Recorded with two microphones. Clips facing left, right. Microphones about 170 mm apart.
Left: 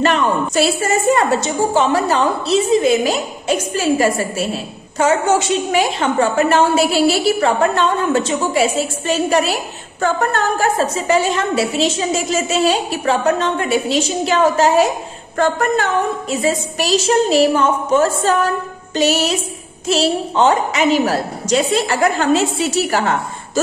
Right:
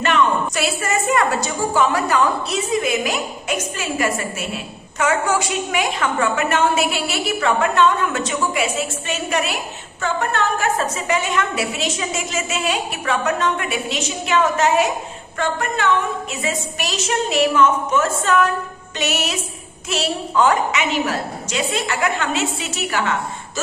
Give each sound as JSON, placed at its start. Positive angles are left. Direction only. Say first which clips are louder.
{"t": 0.0, "sound": "a woman's voice", "louder": "left 2 dB", "side_deg": 35}